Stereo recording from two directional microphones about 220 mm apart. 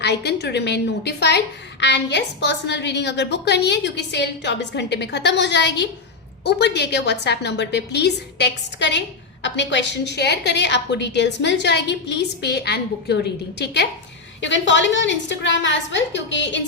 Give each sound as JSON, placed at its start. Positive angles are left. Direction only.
{"t": 0.0, "sound": "a woman's voice", "side_deg": 50}
{"t": 14.4, "sound": "a woman's voice", "side_deg": 55}